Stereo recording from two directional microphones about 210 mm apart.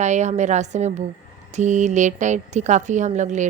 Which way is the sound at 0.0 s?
35° right (ahead or behind).